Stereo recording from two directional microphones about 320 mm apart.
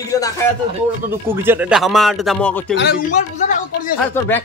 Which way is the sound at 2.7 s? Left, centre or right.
Left.